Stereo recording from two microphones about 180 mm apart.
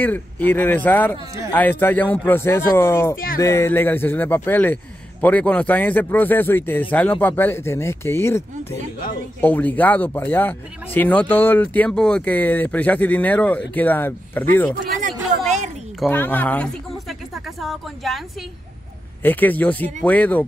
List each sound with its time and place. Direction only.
0.0 s speech: 10° left (ahead or behind)
15.0 s a sound: 40° right (ahead or behind)
16.1 s speech: 10° left (ahead or behind)
19.2 s speech: 10° left (ahead or behind)